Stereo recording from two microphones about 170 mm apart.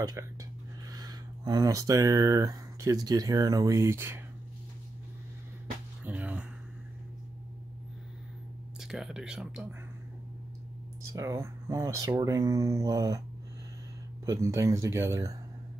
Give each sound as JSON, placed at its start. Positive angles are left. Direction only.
{"t": 0.2, "sound": "speech", "side_deg": -15}
{"t": 6.0, "sound": "a sound", "side_deg": -10}
{"t": 8.7, "sound": "speech", "side_deg": 0}
{"t": 11.1, "sound": "speech", "side_deg": -15}
{"t": 14.2, "sound": "speech", "side_deg": -20}